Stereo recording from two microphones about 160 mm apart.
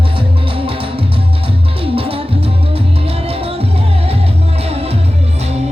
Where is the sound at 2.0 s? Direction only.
35° right (ahead or behind).